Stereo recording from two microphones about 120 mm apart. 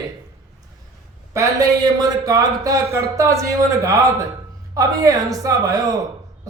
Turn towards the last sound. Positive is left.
turn(degrees=-30)  # may be behind; listen again after turning